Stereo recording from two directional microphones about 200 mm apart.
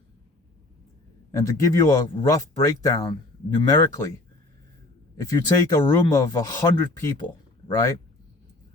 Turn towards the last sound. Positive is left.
turn(degrees=15)  # may be behind; listen again after turning